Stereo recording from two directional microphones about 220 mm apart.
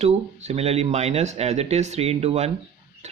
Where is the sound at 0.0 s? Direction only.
30° right (ahead or behind).